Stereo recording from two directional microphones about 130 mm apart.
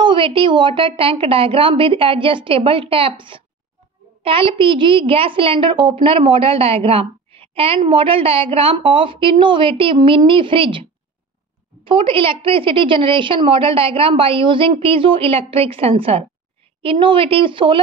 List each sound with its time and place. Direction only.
0.0 s a woman's voice: 40° right (ahead or behind)